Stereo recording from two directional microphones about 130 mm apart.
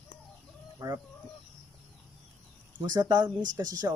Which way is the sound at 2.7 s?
30° right (ahead or behind).